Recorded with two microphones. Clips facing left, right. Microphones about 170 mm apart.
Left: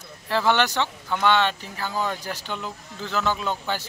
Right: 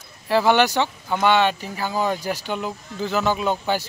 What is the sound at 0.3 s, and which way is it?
Speech, 10° right (ahead or behind).